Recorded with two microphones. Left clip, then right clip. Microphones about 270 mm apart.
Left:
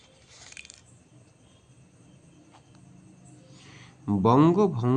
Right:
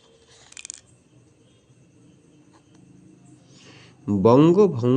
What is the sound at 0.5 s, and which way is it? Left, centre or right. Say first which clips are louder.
Scissors: right 6 dB; centre.